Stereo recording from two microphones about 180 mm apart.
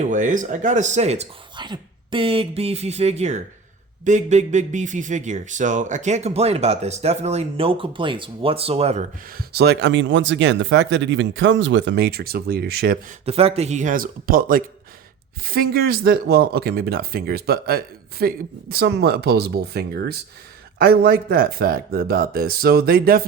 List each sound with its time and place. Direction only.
0.0 s a man's voice: 45° right (ahead or behind)
9.4 s speech: 65° right (ahead or behind)
13.2 s speech: 35° right (ahead or behind); by 23.2 s 55° right (ahead or behind)